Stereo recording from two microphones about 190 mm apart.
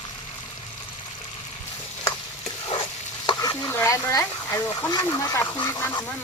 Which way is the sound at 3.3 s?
15° left (ahead or behind).